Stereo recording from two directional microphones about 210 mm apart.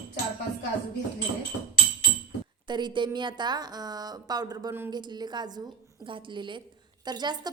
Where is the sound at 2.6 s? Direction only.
20° right (ahead or behind).